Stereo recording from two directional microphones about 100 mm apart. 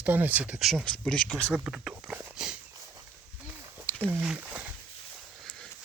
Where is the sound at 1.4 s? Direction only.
10° right (ahead or behind).